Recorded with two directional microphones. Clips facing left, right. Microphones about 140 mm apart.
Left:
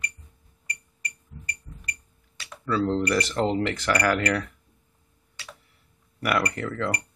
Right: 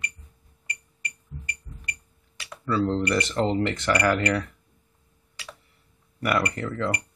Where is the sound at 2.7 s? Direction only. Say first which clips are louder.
Even; centre (ahead or behind).